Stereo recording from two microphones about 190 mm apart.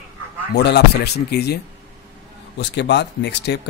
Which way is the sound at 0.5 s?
60° left (ahead or behind).